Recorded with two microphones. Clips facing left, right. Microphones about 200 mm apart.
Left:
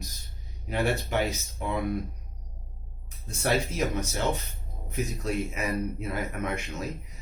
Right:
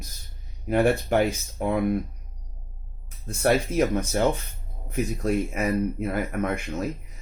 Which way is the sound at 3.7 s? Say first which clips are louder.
Right 7 dB; 55° right (ahead or behind).